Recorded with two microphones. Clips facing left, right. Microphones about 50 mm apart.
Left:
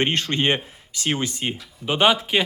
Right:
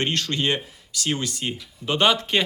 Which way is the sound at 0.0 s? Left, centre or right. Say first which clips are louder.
Left 3 dB; left.